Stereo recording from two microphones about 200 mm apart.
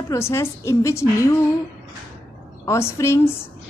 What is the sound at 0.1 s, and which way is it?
A woman's voice, 15° left (ahead or behind).